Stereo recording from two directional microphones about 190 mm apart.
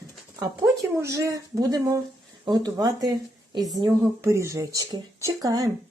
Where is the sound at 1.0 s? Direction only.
15° right (ahead or behind).